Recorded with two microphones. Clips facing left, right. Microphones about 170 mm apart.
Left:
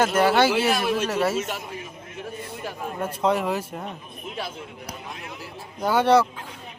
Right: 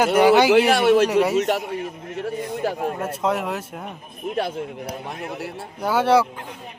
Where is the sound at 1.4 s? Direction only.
70° right (ahead or behind).